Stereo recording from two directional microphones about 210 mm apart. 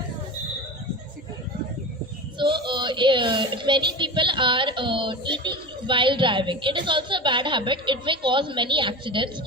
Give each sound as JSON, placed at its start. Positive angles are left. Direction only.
{"t": 2.4, "sound": "speech", "side_deg": -20}